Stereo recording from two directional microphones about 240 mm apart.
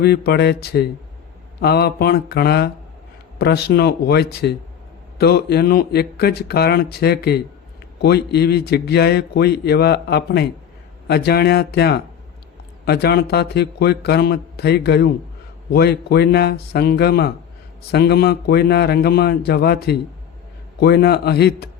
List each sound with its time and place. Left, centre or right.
0.0 s a man's voice: left